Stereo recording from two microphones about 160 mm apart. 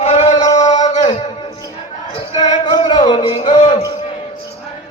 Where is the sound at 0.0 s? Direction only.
45° left (ahead or behind).